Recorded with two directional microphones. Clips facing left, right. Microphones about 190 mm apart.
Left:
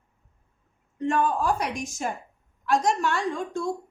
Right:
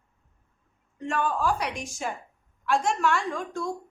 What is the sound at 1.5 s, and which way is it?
A woman's voice, 45° left (ahead or behind).